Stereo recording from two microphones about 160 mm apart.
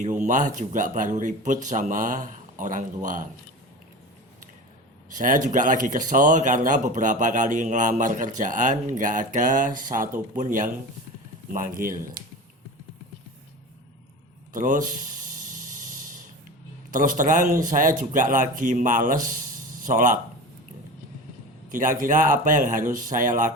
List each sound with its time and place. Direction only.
0.0 s speech: 50° right (ahead or behind)
5.1 s speech: 55° right (ahead or behind)
14.5 s mechanisms: 55° right (ahead or behind)
16.9 s speech: 55° right (ahead or behind)
21.7 s speech: 55° right (ahead or behind)